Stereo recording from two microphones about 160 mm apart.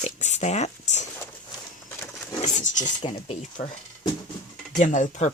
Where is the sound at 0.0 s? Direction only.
45° left (ahead or behind).